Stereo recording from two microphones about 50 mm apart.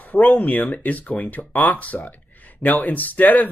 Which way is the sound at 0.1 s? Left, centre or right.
Left.